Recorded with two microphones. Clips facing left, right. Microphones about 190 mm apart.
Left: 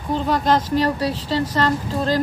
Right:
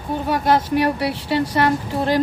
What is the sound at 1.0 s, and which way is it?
Speech, 65° right (ahead or behind).